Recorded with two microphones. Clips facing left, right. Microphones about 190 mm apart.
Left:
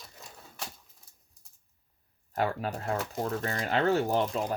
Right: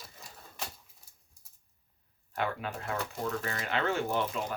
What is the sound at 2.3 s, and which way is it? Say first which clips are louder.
Speech: left 4 dB; 40° left (ahead or behind).